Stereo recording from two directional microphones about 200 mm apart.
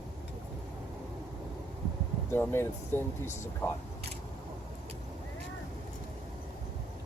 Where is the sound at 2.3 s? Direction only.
10° left (ahead or behind).